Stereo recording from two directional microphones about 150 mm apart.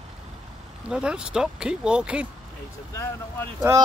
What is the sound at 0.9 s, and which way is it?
Speech, 5° right (ahead or behind).